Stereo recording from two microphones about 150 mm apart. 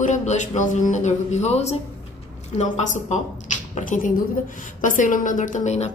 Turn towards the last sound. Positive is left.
turn(degrees=50)  # may be behind; listen again after turning